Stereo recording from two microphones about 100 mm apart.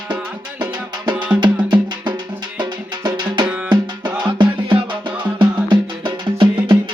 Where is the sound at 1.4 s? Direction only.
50° right (ahead or behind).